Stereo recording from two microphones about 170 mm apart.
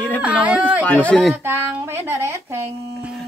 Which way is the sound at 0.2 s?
5° right (ahead or behind).